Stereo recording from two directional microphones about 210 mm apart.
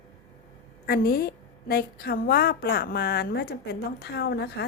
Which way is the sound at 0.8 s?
45° left (ahead or behind).